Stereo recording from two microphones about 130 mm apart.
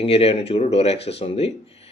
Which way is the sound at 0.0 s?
50° left (ahead or behind).